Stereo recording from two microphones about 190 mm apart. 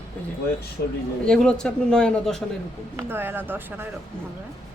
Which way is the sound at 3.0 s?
10° right (ahead or behind).